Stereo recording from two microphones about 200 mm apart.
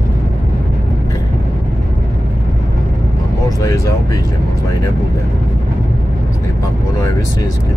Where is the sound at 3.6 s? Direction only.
15° left (ahead or behind).